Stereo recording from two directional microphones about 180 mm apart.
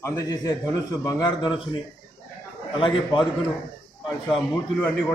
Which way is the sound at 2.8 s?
25° left (ahead or behind).